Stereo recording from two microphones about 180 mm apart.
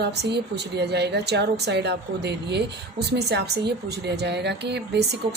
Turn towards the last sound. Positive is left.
turn(degrees=-65)  # may be behind; listen again after turning